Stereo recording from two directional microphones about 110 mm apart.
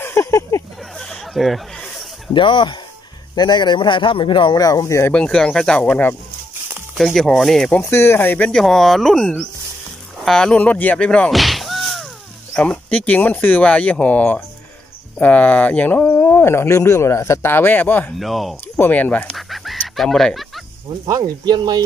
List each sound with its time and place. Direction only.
0.0 s a sound: 25° left (ahead or behind)
0.9 s a sound: 5° left (ahead or behind)
2.3 s speech: 50° left (ahead or behind); by 5.1 s 25° left (ahead or behind)
5.1 s speech: 10° left (ahead or behind)
7.0 s speech: 5° left (ahead or behind)
7.8 s speech: 25° left (ahead or behind); by 12.1 s centre (ahead or behind)
12.5 s speech: 10° left (ahead or behind)
18.2 s speech: centre (ahead or behind)
18.8 s speech: 15° left (ahead or behind)
19.3 s chicken: centre (ahead or behind)
21.0 s speech: 40° right (ahead or behind)